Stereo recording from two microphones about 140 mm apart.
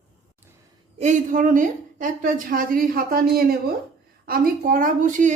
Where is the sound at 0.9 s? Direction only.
65° right (ahead or behind).